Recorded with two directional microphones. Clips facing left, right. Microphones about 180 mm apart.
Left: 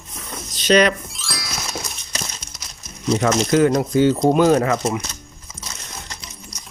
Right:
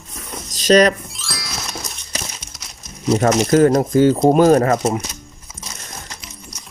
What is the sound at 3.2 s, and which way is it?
Speech, 50° right (ahead or behind).